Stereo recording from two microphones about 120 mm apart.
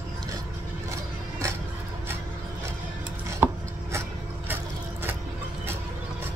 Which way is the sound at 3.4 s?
20° right (ahead or behind).